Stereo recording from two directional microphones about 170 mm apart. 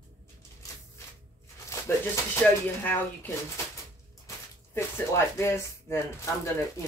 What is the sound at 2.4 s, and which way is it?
Speech, 10° left (ahead or behind).